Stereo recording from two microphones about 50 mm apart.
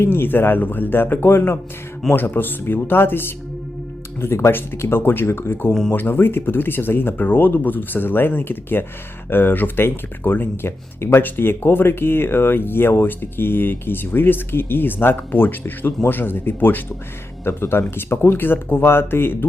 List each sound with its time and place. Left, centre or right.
0.0 s speech: left
2.1 s speech: left
4.2 s speech: left